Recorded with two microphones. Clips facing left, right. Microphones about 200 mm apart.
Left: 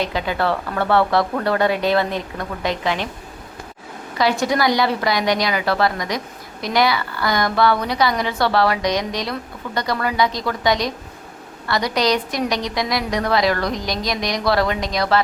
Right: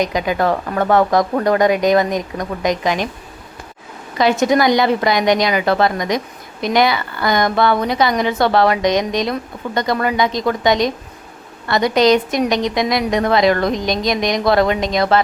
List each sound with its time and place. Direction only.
0.0 s speech: 15° right (ahead or behind)
4.2 s a woman's voice: 20° right (ahead or behind)